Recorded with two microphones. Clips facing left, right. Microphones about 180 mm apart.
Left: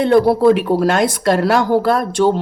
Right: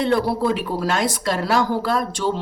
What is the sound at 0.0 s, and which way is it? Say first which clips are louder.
A woman's voice: left 8 dB; 55° left (ahead or behind).